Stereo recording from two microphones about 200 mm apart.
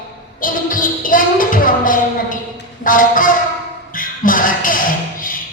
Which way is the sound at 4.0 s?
45° left (ahead or behind).